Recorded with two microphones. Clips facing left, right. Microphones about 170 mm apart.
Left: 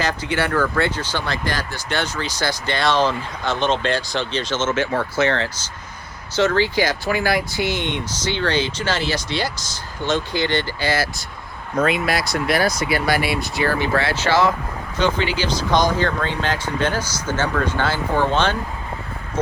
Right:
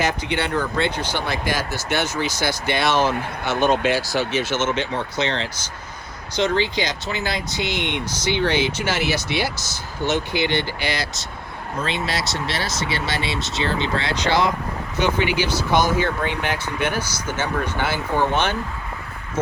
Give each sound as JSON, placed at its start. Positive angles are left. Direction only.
{"t": 0.1, "sound": "speech", "side_deg": -20}
{"t": 11.9, "sound": "speech", "side_deg": -25}